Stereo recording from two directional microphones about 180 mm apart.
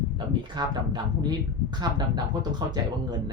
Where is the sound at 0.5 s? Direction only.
25° right (ahead or behind).